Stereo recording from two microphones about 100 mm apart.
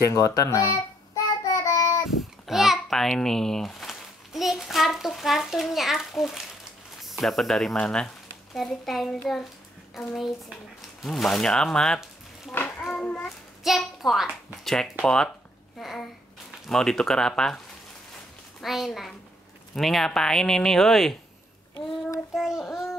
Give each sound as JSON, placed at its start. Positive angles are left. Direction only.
{"t": 0.0, "sound": "child singing", "side_deg": 30}
{"t": 2.0, "sound": "a child's voice", "side_deg": -5}
{"t": 11.0, "sound": "speech", "side_deg": 0}
{"t": 12.6, "sound": "child singing", "side_deg": 10}
{"t": 13.7, "sound": "speech", "side_deg": 0}
{"t": 18.6, "sound": "speech", "side_deg": 0}
{"t": 22.3, "sound": "child singing", "side_deg": 0}